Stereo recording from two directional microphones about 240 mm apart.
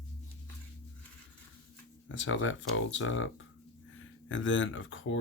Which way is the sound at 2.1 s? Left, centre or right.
Left.